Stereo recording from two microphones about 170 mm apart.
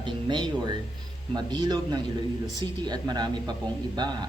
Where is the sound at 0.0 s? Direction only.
25° right (ahead or behind).